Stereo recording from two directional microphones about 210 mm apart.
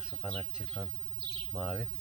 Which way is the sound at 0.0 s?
5° right (ahead or behind).